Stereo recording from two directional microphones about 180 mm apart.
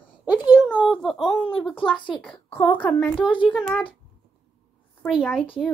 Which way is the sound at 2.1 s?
5° left (ahead or behind).